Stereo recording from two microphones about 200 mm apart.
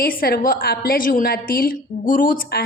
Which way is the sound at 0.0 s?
50° left (ahead or behind).